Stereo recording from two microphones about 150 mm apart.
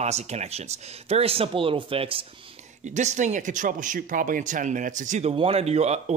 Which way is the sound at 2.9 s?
50° right (ahead or behind).